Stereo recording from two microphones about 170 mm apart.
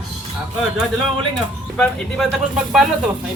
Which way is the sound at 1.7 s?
Centre (ahead or behind).